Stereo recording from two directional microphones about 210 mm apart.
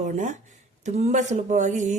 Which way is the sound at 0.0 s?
35° right (ahead or behind).